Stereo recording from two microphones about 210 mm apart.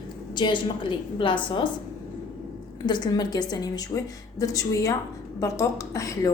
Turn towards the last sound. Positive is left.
turn(degrees=15)  # may be behind; listen again after turning